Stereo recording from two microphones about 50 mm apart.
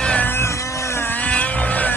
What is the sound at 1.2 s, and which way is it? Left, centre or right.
Vehicle, left.